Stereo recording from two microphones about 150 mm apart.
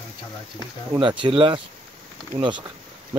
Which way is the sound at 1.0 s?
35° right (ahead or behind).